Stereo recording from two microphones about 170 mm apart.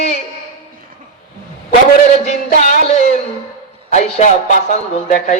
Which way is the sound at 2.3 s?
45° left (ahead or behind).